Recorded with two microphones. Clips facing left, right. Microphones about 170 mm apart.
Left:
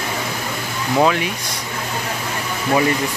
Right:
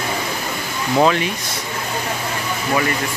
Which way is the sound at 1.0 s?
5° left (ahead or behind).